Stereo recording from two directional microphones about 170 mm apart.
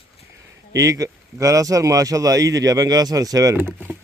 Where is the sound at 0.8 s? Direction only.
20° right (ahead or behind).